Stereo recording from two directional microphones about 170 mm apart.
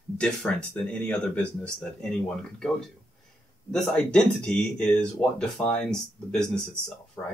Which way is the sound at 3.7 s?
5° left (ahead or behind).